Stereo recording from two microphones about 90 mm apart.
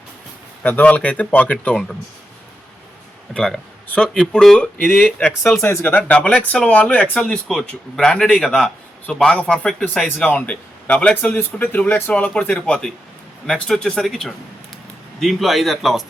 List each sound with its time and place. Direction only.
0.6 s speech: 20° left (ahead or behind)
3.3 s speech: 10° left (ahead or behind)
5.8 s speech: 15° left (ahead or behind); by 16.0 s centre (ahead or behind)